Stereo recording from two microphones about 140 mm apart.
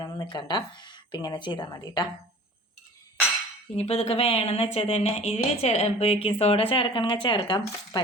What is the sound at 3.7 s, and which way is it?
A woman's voice, 45° left (ahead or behind).